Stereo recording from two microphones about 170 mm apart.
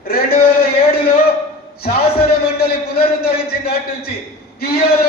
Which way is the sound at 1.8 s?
65° left (ahead or behind).